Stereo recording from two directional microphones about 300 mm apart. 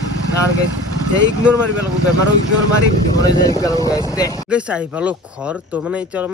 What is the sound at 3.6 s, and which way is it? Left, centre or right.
Speech, centre.